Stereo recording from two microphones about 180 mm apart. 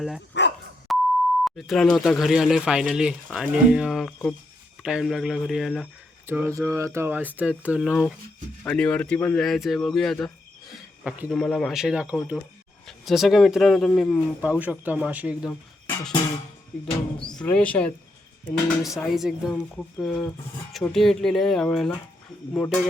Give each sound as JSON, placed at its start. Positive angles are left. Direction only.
{"t": 0.4, "sound": "dog", "side_deg": 80}
{"t": 0.9, "sound": "beep", "side_deg": 0}
{"t": 1.5, "sound": "speech", "side_deg": 0}
{"t": 6.2, "sound": "speech", "side_deg": -15}
{"t": 17.2, "sound": "speech", "side_deg": 5}